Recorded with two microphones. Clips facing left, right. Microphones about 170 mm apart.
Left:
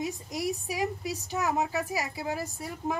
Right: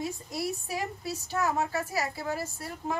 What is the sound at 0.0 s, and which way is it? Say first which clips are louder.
A woman's voice: left 1 dB; 15° left (ahead or behind).